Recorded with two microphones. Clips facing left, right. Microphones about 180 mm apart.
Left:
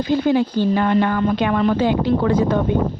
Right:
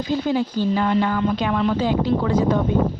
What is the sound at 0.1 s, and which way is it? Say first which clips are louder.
A woman's voice: left 4 dB; 65° left (ahead or behind).